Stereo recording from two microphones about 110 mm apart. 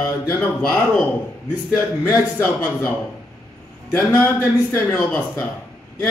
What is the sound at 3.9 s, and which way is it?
Speech, 25° left (ahead or behind).